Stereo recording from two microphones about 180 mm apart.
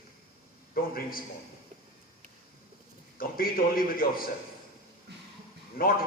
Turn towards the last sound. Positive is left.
turn(degrees=55)  # may be behind; listen again after turning